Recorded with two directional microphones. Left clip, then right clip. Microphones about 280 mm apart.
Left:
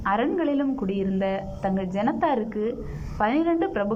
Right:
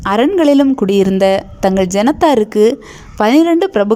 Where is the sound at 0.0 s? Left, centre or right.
Right.